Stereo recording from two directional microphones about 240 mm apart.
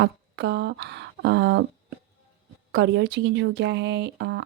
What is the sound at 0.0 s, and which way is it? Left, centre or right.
Speech, right.